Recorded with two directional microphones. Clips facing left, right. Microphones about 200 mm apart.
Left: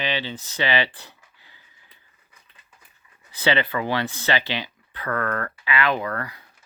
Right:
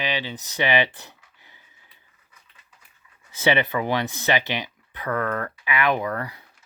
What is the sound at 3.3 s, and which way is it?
Speech, 20° right (ahead or behind).